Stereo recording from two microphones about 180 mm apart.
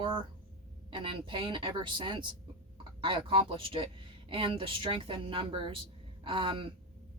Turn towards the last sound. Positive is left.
turn(degrees=-30)  # may be behind; listen again after turning